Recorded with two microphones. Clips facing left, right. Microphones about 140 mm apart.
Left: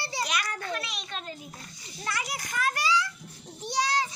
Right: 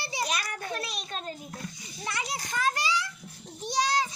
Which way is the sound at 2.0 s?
25° right (ahead or behind).